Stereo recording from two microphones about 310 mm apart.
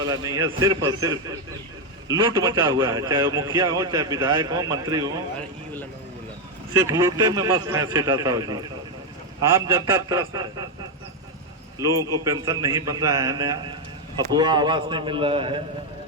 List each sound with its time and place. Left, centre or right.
0.0 s a man's voice: centre
6.7 s a man's voice: centre
11.8 s a man's voice: centre